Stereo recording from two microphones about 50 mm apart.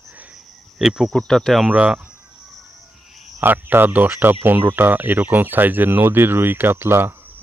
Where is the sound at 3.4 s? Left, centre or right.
Right.